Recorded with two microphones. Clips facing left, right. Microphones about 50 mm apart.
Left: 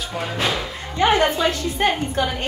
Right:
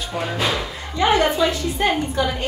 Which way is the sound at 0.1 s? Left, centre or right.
Centre.